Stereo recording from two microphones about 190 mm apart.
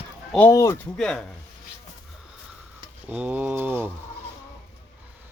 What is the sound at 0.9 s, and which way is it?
Speech, 5° left (ahead or behind).